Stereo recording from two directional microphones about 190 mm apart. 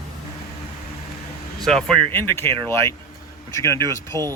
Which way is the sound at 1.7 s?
5° left (ahead or behind).